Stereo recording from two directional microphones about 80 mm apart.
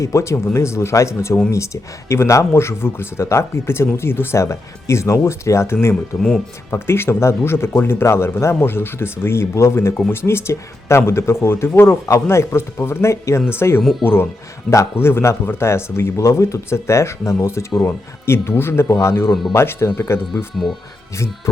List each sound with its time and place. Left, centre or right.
0.0 s speech: left
20.3 s speech: centre